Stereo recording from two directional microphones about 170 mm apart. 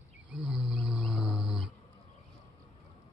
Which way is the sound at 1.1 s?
25° left (ahead or behind).